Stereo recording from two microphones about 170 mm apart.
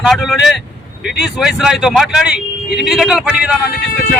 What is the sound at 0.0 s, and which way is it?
Speech, centre (ahead or behind).